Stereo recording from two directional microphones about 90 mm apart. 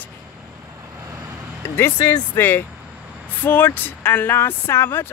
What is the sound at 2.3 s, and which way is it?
Speech, 25° left (ahead or behind).